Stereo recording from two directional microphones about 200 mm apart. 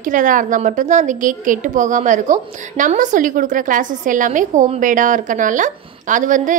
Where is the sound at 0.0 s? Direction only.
40° right (ahead or behind).